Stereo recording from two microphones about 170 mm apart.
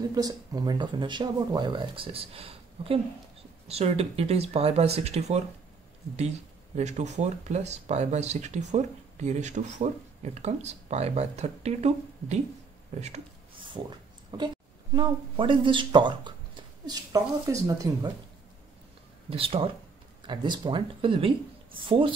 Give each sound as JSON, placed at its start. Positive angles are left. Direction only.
{"t": 0.1, "sound": "speech", "side_deg": -20}
{"t": 6.8, "sound": "speech", "side_deg": -40}
{"t": 13.8, "sound": "a sound", "side_deg": -25}
{"t": 15.0, "sound": "speech", "side_deg": -30}
{"t": 19.2, "sound": "speech", "side_deg": -35}